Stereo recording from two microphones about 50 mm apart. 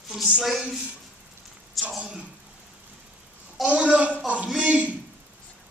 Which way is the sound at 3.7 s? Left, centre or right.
Right.